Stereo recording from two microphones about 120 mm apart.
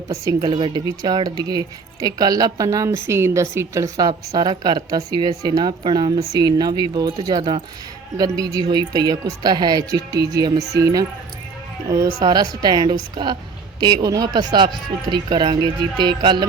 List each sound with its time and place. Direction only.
0.1 s a woman's voice: 30° right (ahead or behind)
0.5 s speech: 45° right (ahead or behind)
0.9 s speech: 35° right (ahead or behind)
11.9 s speech: 35° right (ahead or behind)